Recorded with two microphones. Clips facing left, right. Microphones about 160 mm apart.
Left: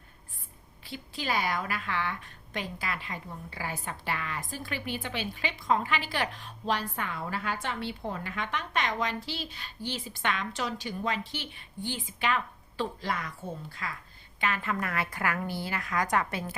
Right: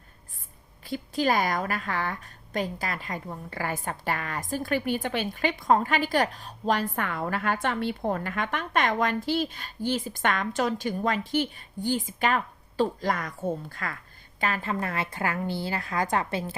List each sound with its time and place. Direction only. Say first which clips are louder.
0.9 s a woman's voice: right 8 dB; 45° right (ahead or behind)
14.4 s a woman's voice: right 2 dB; 35° right (ahead or behind)